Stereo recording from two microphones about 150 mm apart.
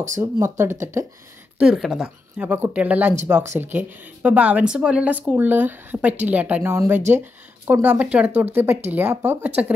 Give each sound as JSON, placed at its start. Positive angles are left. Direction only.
{"t": 0.2, "sound": "speech", "side_deg": -15}
{"t": 1.6, "sound": "speech", "side_deg": -5}